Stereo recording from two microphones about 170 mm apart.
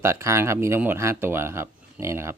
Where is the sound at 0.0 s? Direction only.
15° right (ahead or behind).